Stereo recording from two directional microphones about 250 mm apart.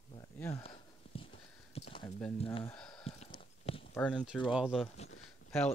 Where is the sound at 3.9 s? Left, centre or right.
Centre.